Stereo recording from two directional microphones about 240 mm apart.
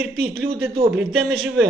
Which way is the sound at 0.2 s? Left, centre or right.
Right.